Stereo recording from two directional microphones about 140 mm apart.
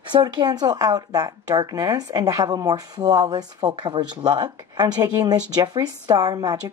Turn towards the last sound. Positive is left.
turn(degrees=-30)  # may be behind; listen again after turning